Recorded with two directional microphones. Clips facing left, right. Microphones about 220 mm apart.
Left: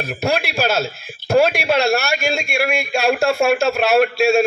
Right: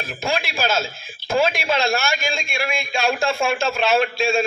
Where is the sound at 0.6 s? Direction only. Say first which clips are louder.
Left 4 dB; 65° left (ahead or behind).